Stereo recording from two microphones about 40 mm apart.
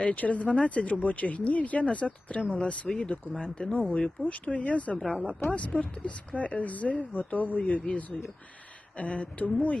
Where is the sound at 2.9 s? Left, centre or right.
Centre.